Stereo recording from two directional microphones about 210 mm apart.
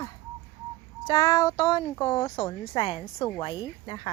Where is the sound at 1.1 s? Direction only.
15° left (ahead or behind).